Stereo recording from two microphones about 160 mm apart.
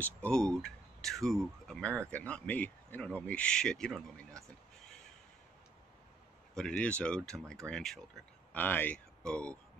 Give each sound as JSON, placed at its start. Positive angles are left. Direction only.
{"t": 0.0, "sound": "speech", "side_deg": 5}
{"t": 6.5, "sound": "speech", "side_deg": 5}